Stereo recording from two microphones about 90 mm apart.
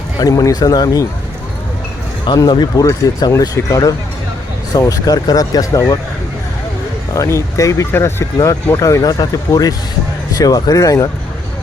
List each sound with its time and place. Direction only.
0.2 s speech: 40° left (ahead or behind)
2.2 s speech: 55° left (ahead or behind)
7.1 s speech: 35° left (ahead or behind)